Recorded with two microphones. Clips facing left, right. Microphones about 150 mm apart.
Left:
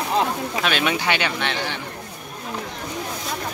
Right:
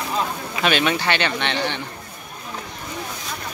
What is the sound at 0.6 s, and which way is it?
Speech, 5° left (ahead or behind).